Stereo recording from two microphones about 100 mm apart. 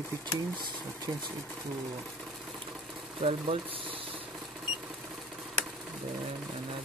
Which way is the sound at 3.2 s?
90° right.